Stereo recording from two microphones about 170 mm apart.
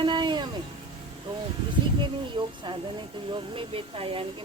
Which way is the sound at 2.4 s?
30° right (ahead or behind).